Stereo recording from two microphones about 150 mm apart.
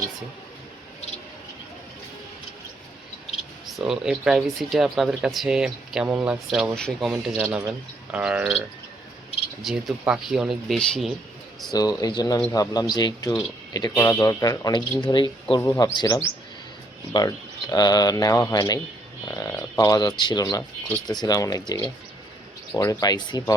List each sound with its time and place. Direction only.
3.8 s speech: 5° right (ahead or behind)
6.7 s speech: 5° left (ahead or behind)
11.7 s speech: 25° left (ahead or behind)
15.6 s speech: 20° left (ahead or behind)